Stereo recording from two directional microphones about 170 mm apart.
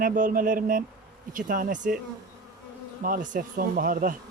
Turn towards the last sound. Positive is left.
turn(degrees=-55)  # may be behind; listen again after turning